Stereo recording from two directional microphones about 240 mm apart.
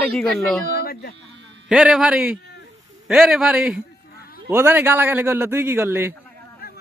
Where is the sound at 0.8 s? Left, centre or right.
Left.